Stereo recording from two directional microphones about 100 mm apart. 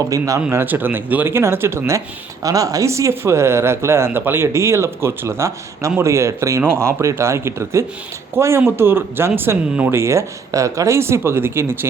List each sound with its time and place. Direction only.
0.1 s speech: 35° right (ahead or behind)
0.5 s speech: 20° right (ahead or behind)
2.4 s speech: 35° right (ahead or behind)